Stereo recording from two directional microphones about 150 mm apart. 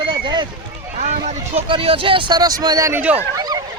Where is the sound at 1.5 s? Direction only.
40° right (ahead or behind).